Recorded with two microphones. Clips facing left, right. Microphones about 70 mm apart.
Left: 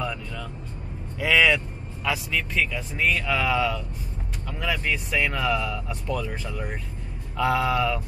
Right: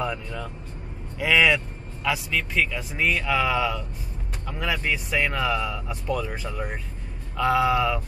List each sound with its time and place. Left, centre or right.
0.0 s speech: right
1.2 s speech: centre